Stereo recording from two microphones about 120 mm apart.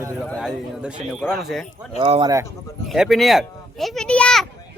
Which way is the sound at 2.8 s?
Centre (ahead or behind).